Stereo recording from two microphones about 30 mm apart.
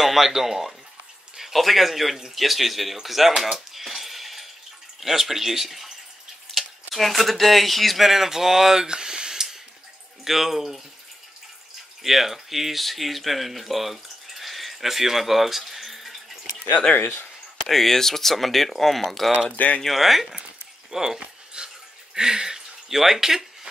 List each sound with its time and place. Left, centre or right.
0.0 s speech: centre
3.5 s a sound: centre
5.0 s speech: centre
6.5 s speech: centre
8.1 s speech: centre
8.8 s a sound: right
10.2 s speech: centre
12.0 s speech: centre
16.7 s speech: left
17.6 s speech: centre
20.9 s speech: centre
21.6 s a sound: right
22.1 s a sound: right